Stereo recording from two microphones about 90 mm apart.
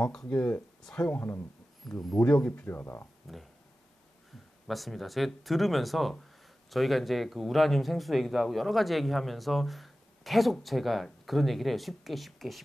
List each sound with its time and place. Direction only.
0.1 s speech: 5° left (ahead or behind); by 1.4 s 25° left (ahead or behind)
1.8 s speech: 5° left (ahead or behind)
2.2 s speech: 15° left (ahead or behind)
4.6 s speech: centre (ahead or behind)